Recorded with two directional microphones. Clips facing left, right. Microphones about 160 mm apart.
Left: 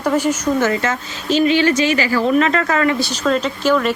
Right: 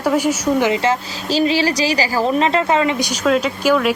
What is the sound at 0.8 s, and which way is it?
Speech, 30° right (ahead or behind).